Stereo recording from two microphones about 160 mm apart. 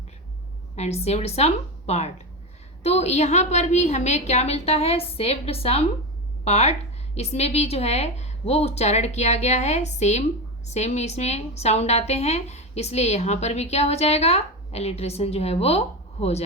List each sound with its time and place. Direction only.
0.8 s a woman's voice: 40° left (ahead or behind)